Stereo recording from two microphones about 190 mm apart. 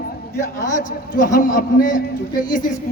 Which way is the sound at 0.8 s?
45° left (ahead or behind).